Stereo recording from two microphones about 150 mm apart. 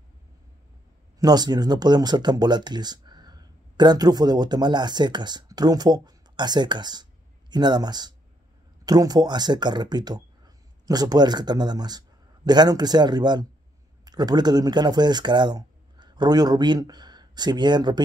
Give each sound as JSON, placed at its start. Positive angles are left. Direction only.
{"t": 1.2, "sound": "a man's voice", "side_deg": -25}